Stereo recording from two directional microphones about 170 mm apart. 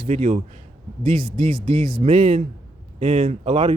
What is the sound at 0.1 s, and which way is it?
Speech, 40° right (ahead or behind).